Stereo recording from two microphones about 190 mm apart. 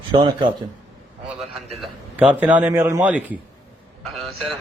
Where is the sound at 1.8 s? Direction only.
10° right (ahead or behind).